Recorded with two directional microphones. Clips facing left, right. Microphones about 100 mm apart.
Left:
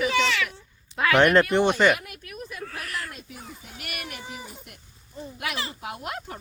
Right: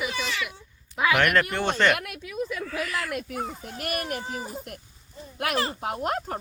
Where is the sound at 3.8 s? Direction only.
40° right (ahead or behind).